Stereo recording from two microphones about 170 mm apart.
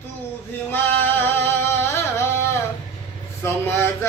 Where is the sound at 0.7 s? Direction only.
10° left (ahead or behind).